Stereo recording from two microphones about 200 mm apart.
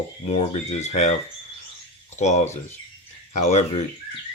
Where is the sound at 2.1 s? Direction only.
35° left (ahead or behind).